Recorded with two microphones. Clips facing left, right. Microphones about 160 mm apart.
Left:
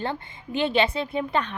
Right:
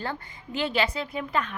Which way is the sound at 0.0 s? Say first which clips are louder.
Left 3 dB; 25° left (ahead or behind).